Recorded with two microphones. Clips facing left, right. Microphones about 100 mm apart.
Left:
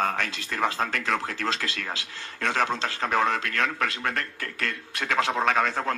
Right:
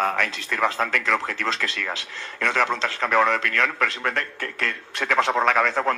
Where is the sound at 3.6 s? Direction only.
40° right (ahead or behind).